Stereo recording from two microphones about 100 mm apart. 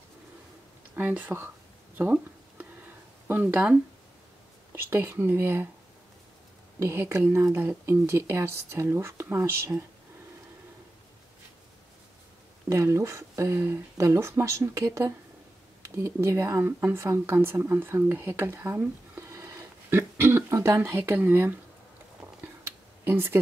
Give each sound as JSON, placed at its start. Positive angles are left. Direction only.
{"t": 0.9, "sound": "speech", "side_deg": -15}
{"t": 2.0, "sound": "a sound", "side_deg": -15}
{"t": 3.3, "sound": "speech", "side_deg": -20}
{"t": 4.7, "sound": "speech", "side_deg": -25}
{"t": 6.8, "sound": "speech", "side_deg": -25}
{"t": 12.6, "sound": "speech", "side_deg": -30}
{"t": 23.0, "sound": "speech", "side_deg": -25}